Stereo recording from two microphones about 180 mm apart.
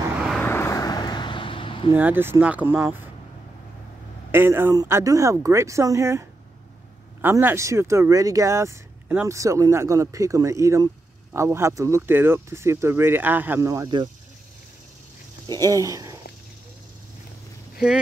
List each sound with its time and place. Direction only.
0.0 s vehicle: 10° right (ahead or behind)
0.4 s vehicle: 15° left (ahead or behind); by 1.9 s 30° left (ahead or behind)
2.0 s speech: 10° right (ahead or behind)
4.3 s speech: 10° right (ahead or behind)
15.4 s speech: 20° right (ahead or behind)